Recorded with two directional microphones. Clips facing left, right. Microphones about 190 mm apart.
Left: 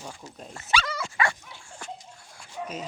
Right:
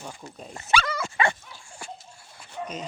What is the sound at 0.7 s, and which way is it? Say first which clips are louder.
Dog: right 3 dB; 55° right (ahead or behind).